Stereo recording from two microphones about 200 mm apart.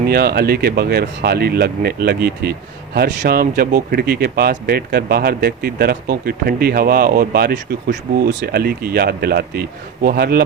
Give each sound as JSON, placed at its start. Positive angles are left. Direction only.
{"t": 0.1, "sound": "speech", "side_deg": -50}